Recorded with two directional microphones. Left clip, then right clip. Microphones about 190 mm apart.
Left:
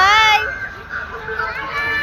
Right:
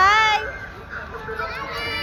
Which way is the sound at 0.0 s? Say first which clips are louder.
Left 4 dB; centre (ahead or behind).